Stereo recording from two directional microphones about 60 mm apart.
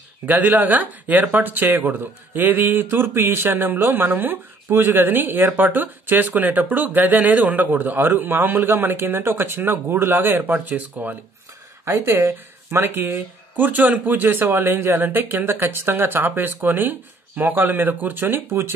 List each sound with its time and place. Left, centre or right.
0.3 s speech: right
10.5 s speech: right
11.8 s speech: right